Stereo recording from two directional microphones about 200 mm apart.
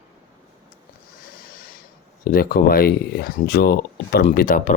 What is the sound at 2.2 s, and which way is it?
Speech, 45° left (ahead or behind).